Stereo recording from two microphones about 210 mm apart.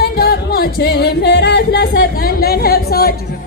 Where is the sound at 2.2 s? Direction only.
45° left (ahead or behind).